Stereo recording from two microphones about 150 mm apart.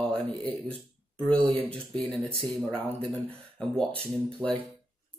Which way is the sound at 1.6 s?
5° left (ahead or behind).